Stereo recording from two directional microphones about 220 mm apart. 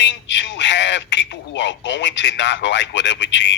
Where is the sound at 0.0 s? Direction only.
55° left (ahead or behind).